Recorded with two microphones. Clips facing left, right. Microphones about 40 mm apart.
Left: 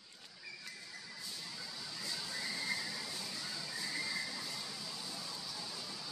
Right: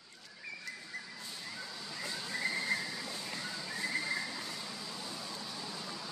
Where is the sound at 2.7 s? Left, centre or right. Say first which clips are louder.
Right 4 dB; right.